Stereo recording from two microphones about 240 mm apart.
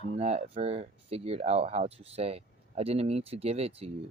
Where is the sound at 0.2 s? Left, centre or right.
Right.